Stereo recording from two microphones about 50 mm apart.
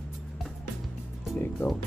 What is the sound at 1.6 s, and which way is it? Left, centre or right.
Speech, left.